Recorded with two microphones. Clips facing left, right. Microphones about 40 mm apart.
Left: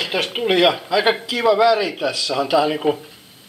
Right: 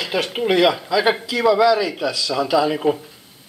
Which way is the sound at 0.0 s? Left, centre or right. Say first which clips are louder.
Even; left.